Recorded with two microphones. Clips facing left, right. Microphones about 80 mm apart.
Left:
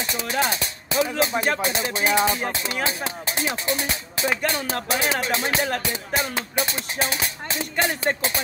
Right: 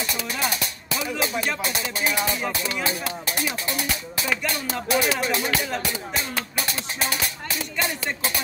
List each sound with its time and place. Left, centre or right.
0.1 s music: left